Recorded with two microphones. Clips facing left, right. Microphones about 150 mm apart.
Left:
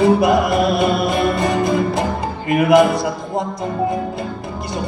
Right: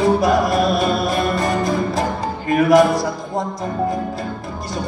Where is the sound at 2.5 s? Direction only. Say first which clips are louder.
Even; 20° left (ahead or behind).